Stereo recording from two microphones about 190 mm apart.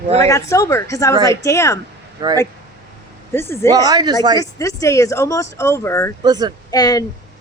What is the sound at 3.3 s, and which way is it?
Speech, 15° left (ahead or behind).